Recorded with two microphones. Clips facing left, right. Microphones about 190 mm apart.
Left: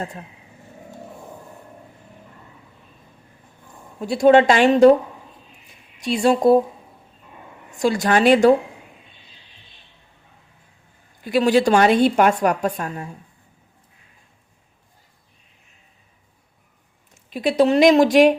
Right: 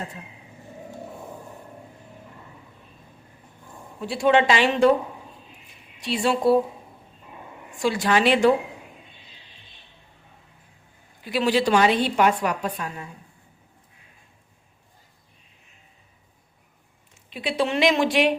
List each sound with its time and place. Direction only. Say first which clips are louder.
4.0 s a woman's voice: left 6 dB; 45° left (ahead or behind)
6.0 s a woman's voice: left 5 dB; 45° left (ahead or behind)
7.7 s a woman's voice: left 3 dB; 45° left (ahead or behind)
11.2 s a woman's voice: left 5 dB; 45° left (ahead or behind)
17.2 s a woman's voice: left 8 dB; 45° left (ahead or behind)